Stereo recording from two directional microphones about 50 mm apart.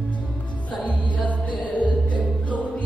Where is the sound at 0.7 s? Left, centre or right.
Left.